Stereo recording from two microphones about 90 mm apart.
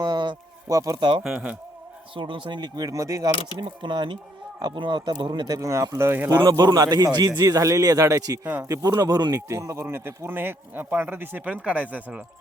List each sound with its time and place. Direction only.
0.0 s a sound: 55° right (ahead or behind)
0.7 s speech: 40° right (ahead or behind)
0.9 s speech: 65° right (ahead or behind)
1.2 s speech: 10° right (ahead or behind)
2.1 s a man's voice: 65° right (ahead or behind); by 3.3 s 40° right (ahead or behind)
3.6 s speech: 60° right (ahead or behind)
5.5 s speech: 35° right (ahead or behind)
6.3 s a man's voice: 45° right (ahead or behind); by 12.2 s 15° right (ahead or behind)